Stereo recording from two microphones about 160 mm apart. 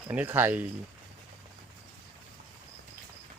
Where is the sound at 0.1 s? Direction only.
10° right (ahead or behind).